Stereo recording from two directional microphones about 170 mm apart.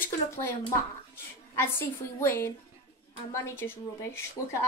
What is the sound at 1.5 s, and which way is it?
Speech, 15° left (ahead or behind).